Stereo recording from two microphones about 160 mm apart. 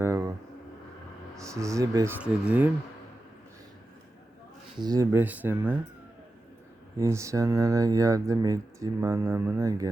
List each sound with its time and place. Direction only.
0.0 s a sound: 15° right (ahead or behind)
1.4 s speech: 20° right (ahead or behind)
2.2 s speech: 10° right (ahead or behind)
4.8 s speech: 25° right (ahead or behind)
5.1 s speech: 10° right (ahead or behind)
7.0 s speech: 20° right (ahead or behind)